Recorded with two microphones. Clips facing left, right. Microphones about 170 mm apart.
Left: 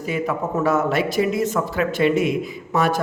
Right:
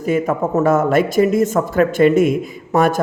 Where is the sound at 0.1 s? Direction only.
50° right (ahead or behind).